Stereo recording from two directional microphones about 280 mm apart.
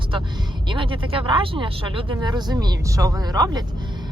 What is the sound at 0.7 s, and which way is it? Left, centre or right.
Speech, centre.